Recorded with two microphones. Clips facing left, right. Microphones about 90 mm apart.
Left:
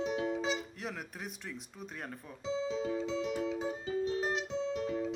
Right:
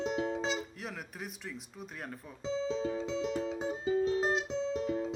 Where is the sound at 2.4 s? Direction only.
35° right (ahead or behind).